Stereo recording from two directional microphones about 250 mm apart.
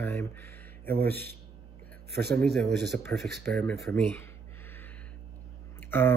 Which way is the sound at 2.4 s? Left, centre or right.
Right.